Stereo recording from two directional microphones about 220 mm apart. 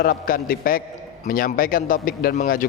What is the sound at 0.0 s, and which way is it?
A man's voice, 40° left (ahead or behind).